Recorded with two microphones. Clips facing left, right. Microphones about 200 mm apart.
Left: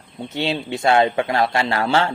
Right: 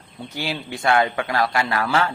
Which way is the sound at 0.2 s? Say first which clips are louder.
Left 5 dB; 25° left (ahead or behind).